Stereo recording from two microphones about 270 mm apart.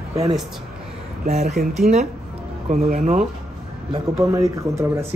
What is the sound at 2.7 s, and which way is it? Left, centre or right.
Speech, right.